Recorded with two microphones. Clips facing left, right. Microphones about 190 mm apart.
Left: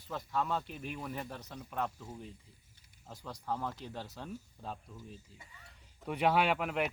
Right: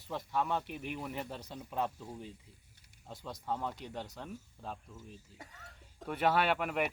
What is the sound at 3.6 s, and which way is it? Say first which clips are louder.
Speech: even; 20° right (ahead or behind).